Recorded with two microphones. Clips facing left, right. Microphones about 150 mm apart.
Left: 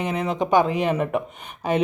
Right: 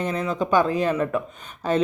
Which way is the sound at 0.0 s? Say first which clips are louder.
Left 1 dB; 20° left (ahead or behind).